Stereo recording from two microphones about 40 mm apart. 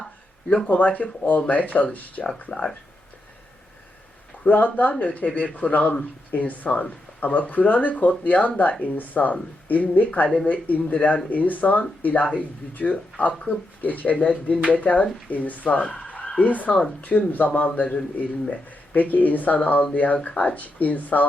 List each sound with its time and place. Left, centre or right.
0.9 s speech: left
2.5 s speech: centre
4.4 s speech: left
16.0 s fowl: left
16.4 s speech: left
17.7 s speech: left